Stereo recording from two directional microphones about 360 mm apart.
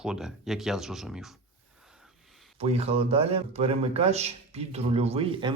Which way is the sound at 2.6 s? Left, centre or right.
Centre.